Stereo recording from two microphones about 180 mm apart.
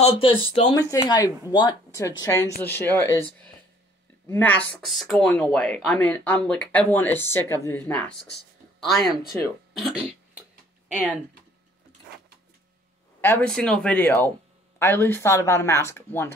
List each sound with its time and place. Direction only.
0.0 s speech: 30° left (ahead or behind); by 8.1 s 10° left (ahead or behind)
9.3 s speech: centre (ahead or behind)
13.2 s speech: 10° left (ahead or behind)